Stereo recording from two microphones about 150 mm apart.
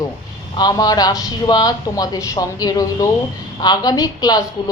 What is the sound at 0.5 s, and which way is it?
A woman's voice, 25° left (ahead or behind).